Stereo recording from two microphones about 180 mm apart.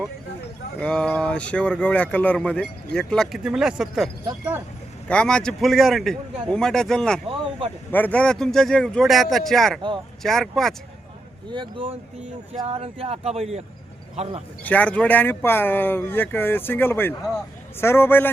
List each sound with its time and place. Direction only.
0.8 s speech: 5° left (ahead or behind)
11.5 s speech: 25° right (ahead or behind)
14.6 s speech: 10° left (ahead or behind)